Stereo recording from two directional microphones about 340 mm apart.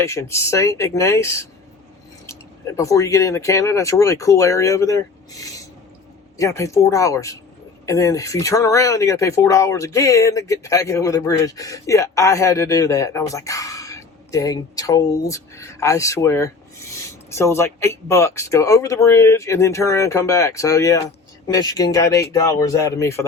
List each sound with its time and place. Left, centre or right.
0.0 s speech: centre